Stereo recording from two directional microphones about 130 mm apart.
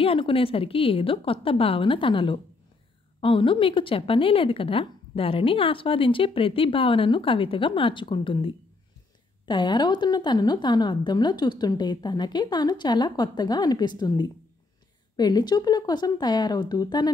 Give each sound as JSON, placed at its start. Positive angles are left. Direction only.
{"t": 0.0, "sound": "a woman's voice", "side_deg": 45}